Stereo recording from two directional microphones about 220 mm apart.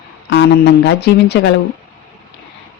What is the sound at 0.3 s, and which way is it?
Speech, 50° left (ahead or behind).